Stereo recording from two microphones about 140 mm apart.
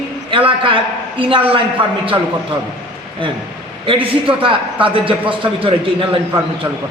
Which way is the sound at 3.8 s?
40° right (ahead or behind).